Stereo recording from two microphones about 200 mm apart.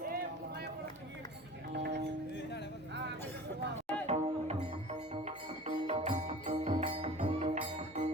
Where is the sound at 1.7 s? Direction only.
55° right (ahead or behind).